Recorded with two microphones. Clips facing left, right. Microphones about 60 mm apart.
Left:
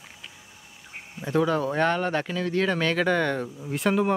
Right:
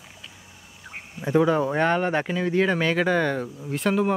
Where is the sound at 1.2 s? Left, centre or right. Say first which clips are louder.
Right 3 dB; centre.